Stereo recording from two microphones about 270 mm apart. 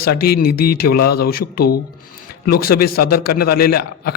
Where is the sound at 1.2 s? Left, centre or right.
Left.